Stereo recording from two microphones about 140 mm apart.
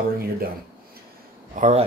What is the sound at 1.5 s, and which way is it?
Speech, 55° right (ahead or behind).